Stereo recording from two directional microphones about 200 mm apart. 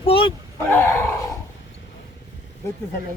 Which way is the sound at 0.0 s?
25° left (ahead or behind).